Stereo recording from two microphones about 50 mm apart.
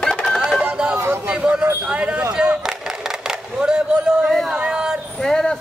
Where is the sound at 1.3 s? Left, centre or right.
Right.